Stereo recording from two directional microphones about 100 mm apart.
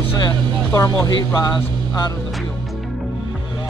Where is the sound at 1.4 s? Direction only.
40° left (ahead or behind).